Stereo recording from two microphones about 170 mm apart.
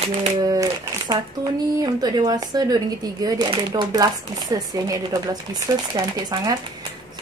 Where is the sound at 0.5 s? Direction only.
25° right (ahead or behind).